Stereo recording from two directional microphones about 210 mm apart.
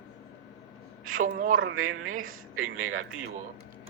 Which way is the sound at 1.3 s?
40° right (ahead or behind).